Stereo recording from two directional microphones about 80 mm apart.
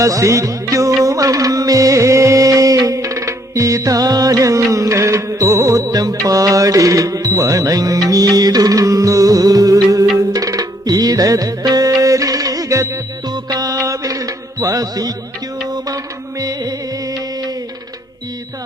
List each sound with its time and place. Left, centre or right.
0.0 s music: right
13.2 s music: right
16.4 s music: right